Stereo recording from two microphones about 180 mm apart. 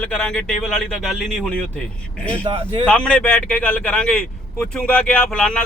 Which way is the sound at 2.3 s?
30° right (ahead or behind).